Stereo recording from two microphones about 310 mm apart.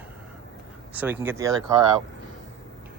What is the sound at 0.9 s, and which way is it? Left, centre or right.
Speech, centre.